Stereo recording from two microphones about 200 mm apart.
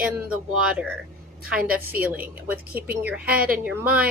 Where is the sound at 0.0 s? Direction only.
5° right (ahead or behind).